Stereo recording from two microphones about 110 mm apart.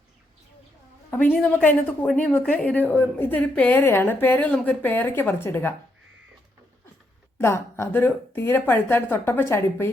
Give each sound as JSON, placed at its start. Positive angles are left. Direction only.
{"t": 1.1, "sound": "a woman's voice", "side_deg": 15}
{"t": 7.3, "sound": "a woman's voice", "side_deg": 25}